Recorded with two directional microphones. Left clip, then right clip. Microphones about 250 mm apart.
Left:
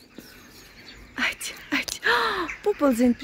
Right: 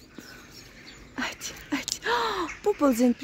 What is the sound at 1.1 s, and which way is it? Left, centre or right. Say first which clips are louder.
Speech: left 6 dB; centre.